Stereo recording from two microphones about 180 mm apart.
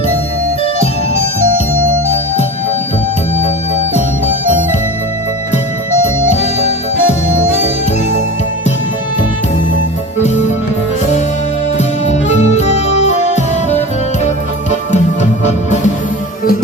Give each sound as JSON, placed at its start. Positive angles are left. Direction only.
{"t": 6.2, "sound": "music", "side_deg": 40}
{"t": 12.4, "sound": "music", "side_deg": 40}
{"t": 15.2, "sound": "music", "side_deg": 40}